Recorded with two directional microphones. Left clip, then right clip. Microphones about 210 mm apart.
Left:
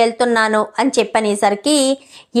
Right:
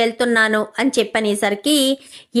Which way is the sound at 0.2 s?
20° right (ahead or behind).